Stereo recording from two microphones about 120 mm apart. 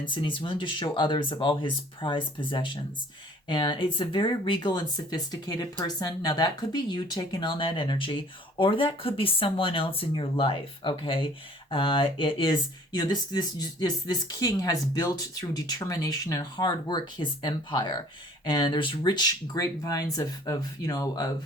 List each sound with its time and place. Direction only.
0.0 s speech: 40° left (ahead or behind)